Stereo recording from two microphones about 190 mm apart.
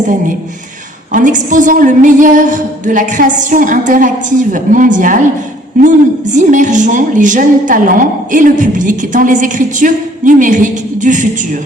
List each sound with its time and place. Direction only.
1.1 s a woman's voice: 40° right (ahead or behind)
6.3 s a woman's voice: 40° right (ahead or behind)